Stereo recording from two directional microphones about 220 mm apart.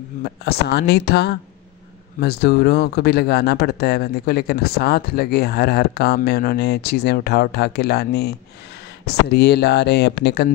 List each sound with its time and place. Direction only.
0.2 s speech: 50° left (ahead or behind)